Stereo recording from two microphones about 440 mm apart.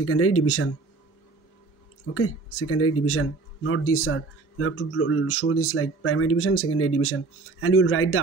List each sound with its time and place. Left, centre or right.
0.0 s speech: left
2.1 s a man's voice: left